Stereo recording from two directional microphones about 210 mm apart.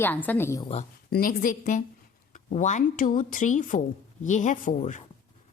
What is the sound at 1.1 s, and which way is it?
A woman's voice, 45° left (ahead or behind).